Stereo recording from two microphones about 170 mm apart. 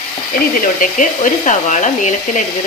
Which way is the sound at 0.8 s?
50° left (ahead or behind).